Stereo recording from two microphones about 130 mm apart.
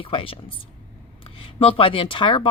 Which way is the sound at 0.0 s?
45° left (ahead or behind).